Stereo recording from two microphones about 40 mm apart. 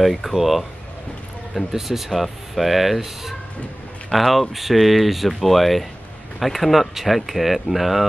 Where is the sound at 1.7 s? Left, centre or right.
Centre.